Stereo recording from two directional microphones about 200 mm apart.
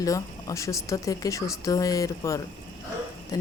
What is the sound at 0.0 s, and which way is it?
Speech, 15° left (ahead or behind).